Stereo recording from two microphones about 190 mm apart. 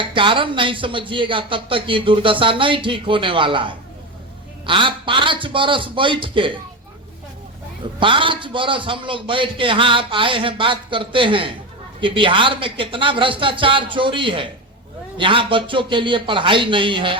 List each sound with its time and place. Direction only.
0.0 s speech: 25° right (ahead or behind)
7.9 s speech: 25° right (ahead or behind)